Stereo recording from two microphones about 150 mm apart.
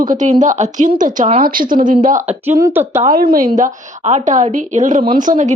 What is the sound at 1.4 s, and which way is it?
Speech, 70° right (ahead or behind).